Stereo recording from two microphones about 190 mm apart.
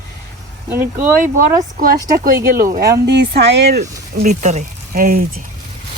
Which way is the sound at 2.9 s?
60° right (ahead or behind).